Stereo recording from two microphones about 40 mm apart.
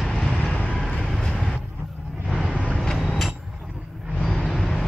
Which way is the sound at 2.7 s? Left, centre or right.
Centre.